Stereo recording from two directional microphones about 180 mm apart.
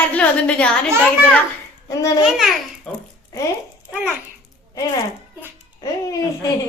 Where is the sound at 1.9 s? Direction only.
15° left (ahead or behind).